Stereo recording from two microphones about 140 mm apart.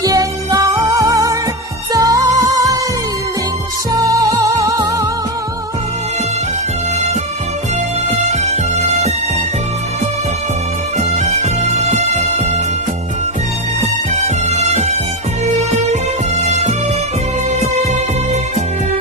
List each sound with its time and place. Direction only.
0.0 s music: 25° right (ahead or behind)
3.9 s music: 25° right (ahead or behind)
8.3 s music: 50° right (ahead or behind)
11.0 s music: 55° right (ahead or behind)
14.2 s music: 50° right (ahead or behind)